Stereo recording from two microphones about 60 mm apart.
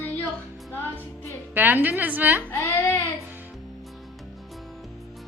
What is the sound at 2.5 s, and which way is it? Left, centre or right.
Baby cry, left.